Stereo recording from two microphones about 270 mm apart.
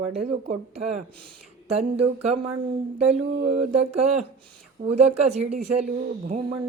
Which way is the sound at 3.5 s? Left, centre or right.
Right.